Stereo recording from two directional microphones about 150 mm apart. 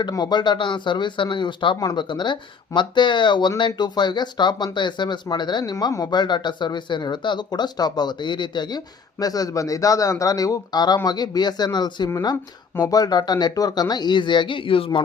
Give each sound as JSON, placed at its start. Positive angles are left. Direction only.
{"t": 0.0, "sound": "speech", "side_deg": 30}